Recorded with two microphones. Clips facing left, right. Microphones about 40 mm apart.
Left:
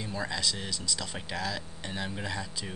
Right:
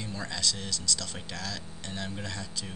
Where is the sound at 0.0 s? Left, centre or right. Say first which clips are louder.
Left 1 dB; centre.